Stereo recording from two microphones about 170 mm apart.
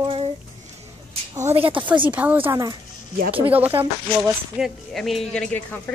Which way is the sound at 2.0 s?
10° right (ahead or behind).